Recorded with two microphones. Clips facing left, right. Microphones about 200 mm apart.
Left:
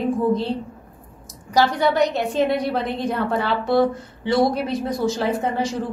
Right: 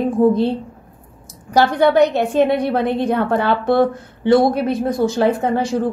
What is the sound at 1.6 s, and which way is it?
A woman's voice, 60° right (ahead or behind).